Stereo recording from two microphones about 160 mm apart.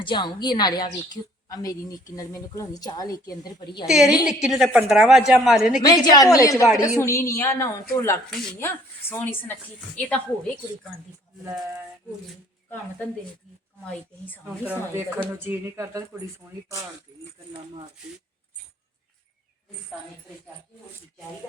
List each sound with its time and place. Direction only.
0.0 s a woman's voice: 30° left (ahead or behind)
3.8 s a woman's voice: centre (ahead or behind)
5.8 s a woman's voice: 25° left (ahead or behind); by 10.5 s 10° left (ahead or behind)
14.4 s speech: 10° right (ahead or behind)